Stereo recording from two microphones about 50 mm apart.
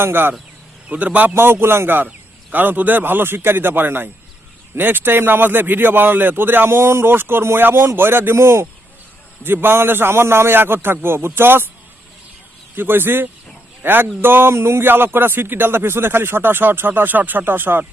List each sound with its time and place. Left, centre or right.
0.0 s speech: right
0.9 s a man's voice: right
1.3 s speech: right
9.4 s speech: right
12.7 s speech: right
14.5 s speech: right
14.8 s speech: right